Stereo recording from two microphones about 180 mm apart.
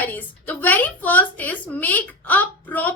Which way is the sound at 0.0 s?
10° left (ahead or behind).